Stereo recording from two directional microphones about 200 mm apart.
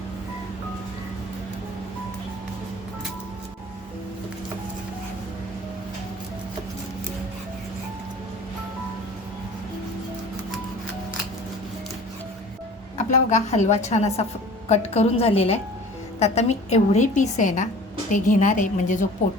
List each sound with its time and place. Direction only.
13.0 s a woman's voice: 35° left (ahead or behind)